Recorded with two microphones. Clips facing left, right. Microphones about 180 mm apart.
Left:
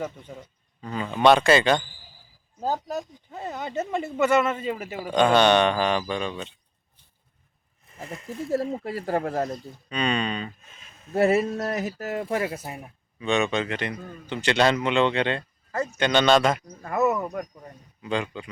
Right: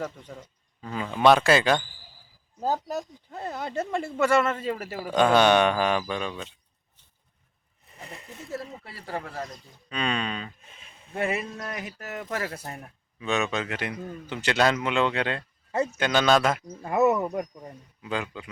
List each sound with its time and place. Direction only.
0.0 s speech: 5° left (ahead or behind)
7.9 s speech: 35° left (ahead or behind)
9.9 s a sound: centre (ahead or behind)
11.1 s speech: 40° left (ahead or behind)
12.5 s speech: 10° left (ahead or behind)
13.1 s speech: centre (ahead or behind)
16.8 s speech: 15° right (ahead or behind)